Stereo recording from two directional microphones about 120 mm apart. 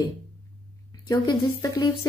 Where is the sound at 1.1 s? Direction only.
30° left (ahead or behind).